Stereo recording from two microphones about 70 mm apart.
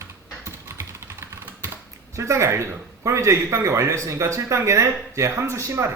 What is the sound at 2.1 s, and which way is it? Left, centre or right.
A man's voice, right.